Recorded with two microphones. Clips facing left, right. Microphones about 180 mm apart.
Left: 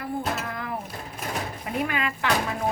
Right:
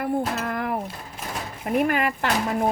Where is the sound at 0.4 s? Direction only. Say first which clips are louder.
Right 6 dB; 60° right (ahead or behind).